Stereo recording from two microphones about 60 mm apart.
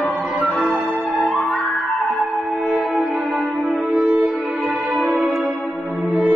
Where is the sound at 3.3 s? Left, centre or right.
Centre.